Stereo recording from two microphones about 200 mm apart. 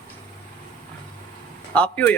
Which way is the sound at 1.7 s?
5° left (ahead or behind).